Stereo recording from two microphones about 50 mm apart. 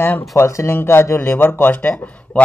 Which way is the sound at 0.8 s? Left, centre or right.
Left.